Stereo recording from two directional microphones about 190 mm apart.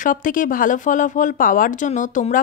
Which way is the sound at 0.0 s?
45° left (ahead or behind).